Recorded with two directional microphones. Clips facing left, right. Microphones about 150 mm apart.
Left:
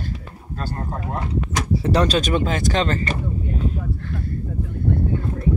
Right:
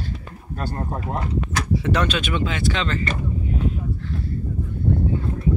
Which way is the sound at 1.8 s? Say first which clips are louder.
Left 5 dB; 35° left (ahead or behind).